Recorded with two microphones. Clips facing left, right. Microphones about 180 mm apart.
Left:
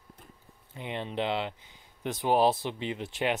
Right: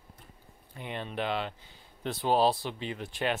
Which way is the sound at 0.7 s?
20° left (ahead or behind).